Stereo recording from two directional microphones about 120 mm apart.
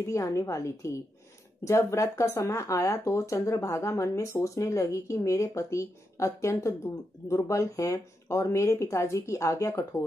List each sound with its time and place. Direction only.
0.0 s speech: 25° left (ahead or behind)